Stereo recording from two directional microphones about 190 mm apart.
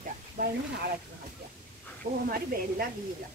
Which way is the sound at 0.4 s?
50° right (ahead or behind).